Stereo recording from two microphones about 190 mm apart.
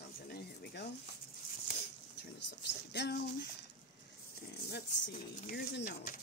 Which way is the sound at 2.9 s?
60° left (ahead or behind).